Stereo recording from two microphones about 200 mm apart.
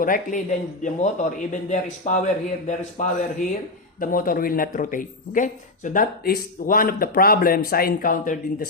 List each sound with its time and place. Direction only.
0.0 s a man's voice: 40° left (ahead or behind)